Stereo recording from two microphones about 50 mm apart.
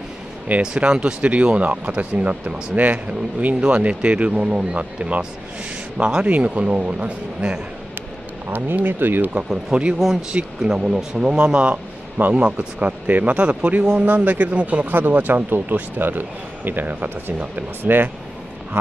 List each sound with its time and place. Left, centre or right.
0.6 s speech: centre
8.5 s speech: right
9.7 s speech: centre; by 18.1 s right